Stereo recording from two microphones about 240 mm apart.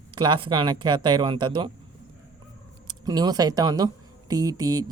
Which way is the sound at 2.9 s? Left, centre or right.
Centre.